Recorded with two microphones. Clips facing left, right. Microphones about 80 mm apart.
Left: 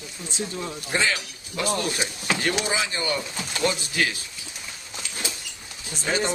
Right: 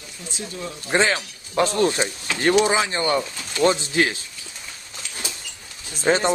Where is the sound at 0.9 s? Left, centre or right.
Right.